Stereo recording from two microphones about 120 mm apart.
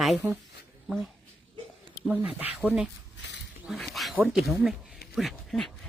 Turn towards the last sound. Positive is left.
turn(degrees=0)  # may be behind; listen again after turning